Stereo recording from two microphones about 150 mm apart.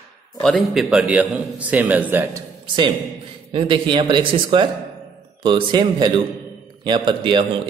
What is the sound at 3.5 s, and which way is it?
Speech, 35° right (ahead or behind).